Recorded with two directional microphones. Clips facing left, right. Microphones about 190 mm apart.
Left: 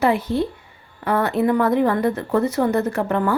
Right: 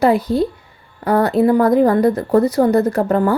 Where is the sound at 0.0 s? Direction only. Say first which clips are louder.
Right 5 dB; 35° right (ahead or behind).